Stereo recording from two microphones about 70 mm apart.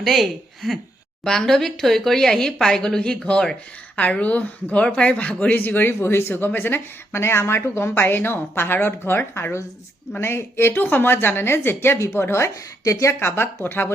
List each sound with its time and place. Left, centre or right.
0.0 s a woman's voice: centre; by 13.1 s left
13.1 s a woman's voice: left